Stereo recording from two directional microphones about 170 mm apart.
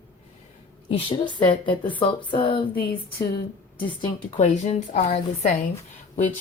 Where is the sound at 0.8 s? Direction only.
30° left (ahead or behind).